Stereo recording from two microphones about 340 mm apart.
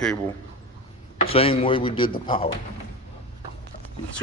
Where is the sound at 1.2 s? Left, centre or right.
Centre.